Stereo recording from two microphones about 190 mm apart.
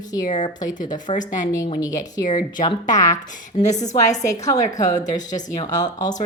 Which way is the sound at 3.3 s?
40° left (ahead or behind).